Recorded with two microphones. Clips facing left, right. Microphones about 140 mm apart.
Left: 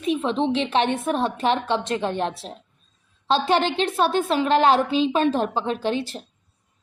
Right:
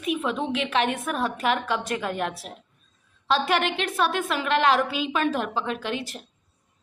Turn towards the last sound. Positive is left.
turn(degrees=30)  # may be behind; listen again after turning